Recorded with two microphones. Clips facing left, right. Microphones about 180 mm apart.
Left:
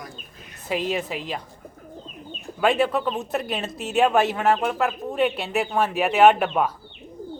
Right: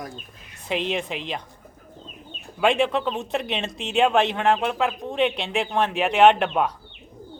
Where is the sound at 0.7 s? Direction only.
5° left (ahead or behind).